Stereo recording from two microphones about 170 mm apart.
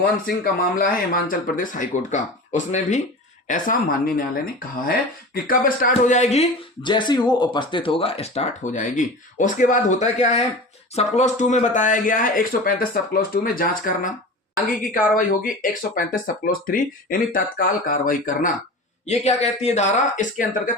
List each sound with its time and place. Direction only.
0.4 s speech: 55° left (ahead or behind)
19.0 s speech: 40° left (ahead or behind)